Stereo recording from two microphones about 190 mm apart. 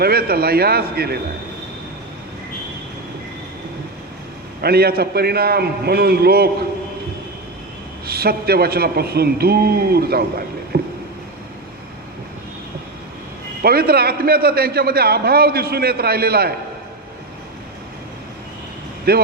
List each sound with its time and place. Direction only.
0.0 s a man's voice: 55° right (ahead or behind)
4.6 s a man's voice: 55° right (ahead or behind)
8.0 s a man's voice: 55° right (ahead or behind)
13.6 s a man's voice: 55° right (ahead or behind)
19.1 s a man's voice: 55° right (ahead or behind)